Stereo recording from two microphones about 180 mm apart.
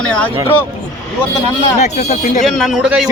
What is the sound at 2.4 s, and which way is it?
Speech, centre (ahead or behind).